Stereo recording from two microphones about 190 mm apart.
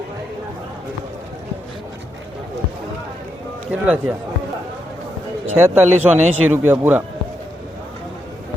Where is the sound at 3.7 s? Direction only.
5° right (ahead or behind).